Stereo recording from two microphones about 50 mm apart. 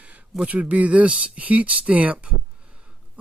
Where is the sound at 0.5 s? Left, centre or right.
Right.